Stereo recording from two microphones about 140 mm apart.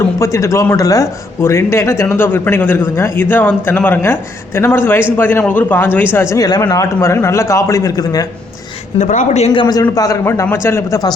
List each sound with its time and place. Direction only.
0.2 s speech: 20° left (ahead or behind)
6.3 s a man's voice: 25° left (ahead or behind)
9.0 s a man's voice: 60° left (ahead or behind); by 11.1 s 25° left (ahead or behind)